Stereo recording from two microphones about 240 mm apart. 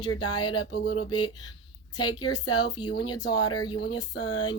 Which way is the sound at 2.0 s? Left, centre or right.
Centre.